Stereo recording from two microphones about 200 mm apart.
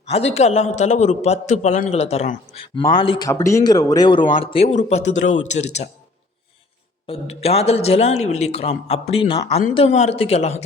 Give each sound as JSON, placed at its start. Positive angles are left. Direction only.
{"t": 0.1, "sound": "speech", "side_deg": 30}
{"t": 2.7, "sound": "speech", "side_deg": 25}
{"t": 7.1, "sound": "speech", "side_deg": 30}